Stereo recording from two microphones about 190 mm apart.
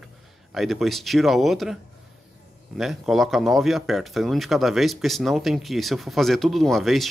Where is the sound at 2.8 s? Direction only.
Centre (ahead or behind).